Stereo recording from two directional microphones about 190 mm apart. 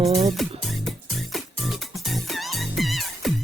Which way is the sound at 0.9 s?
Centre (ahead or behind).